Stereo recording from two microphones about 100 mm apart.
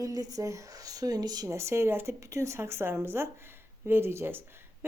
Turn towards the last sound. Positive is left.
turn(degrees=-25)  # may be behind; listen again after turning